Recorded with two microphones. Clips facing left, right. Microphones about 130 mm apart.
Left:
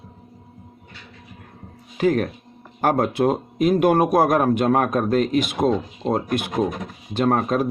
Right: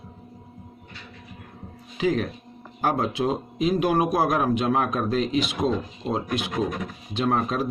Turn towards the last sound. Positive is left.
turn(degrees=55)  # may be behind; listen again after turning